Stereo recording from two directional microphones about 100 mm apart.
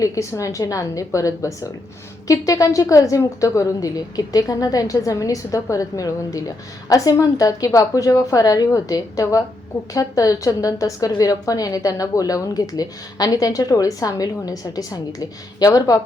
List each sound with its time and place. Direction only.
0.0 s a woman's voice: 35° left (ahead or behind)